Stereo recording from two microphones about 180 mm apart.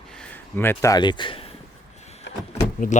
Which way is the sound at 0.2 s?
10° left (ahead or behind).